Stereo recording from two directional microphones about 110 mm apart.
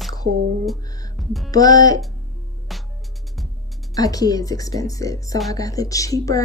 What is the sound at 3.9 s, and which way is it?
Speech, 35° left (ahead or behind).